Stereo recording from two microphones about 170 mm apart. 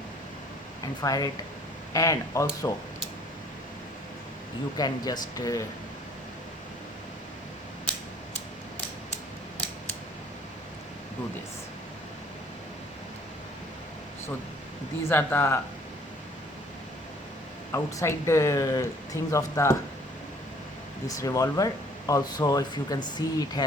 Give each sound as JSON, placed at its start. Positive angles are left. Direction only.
{"t": 1.0, "sound": "speech", "side_deg": 20}
{"t": 4.8, "sound": "speech", "side_deg": 25}
{"t": 15.0, "sound": "speech", "side_deg": 10}
{"t": 17.7, "sound": "speech", "side_deg": 15}
{"t": 21.1, "sound": "speech", "side_deg": 20}